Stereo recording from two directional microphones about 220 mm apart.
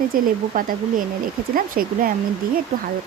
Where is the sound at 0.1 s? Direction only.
40° right (ahead or behind).